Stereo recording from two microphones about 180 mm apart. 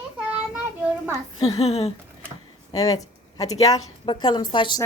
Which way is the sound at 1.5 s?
35° left (ahead or behind).